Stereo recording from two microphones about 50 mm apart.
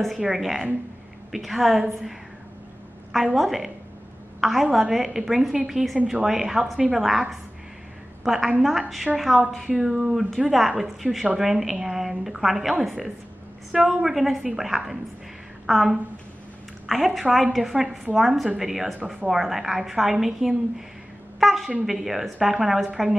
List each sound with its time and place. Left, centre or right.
0.2 s a woman's voice: centre
3.3 s a woman's voice: centre